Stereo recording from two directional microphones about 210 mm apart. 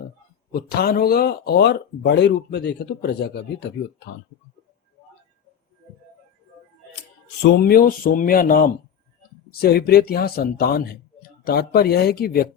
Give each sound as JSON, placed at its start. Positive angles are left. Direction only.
{"t": 0.5, "sound": "speech", "side_deg": 45}
{"t": 7.4, "sound": "speech", "side_deg": 50}